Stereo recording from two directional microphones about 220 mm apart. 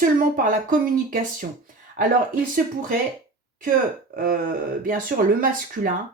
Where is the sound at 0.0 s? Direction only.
40° right (ahead or behind).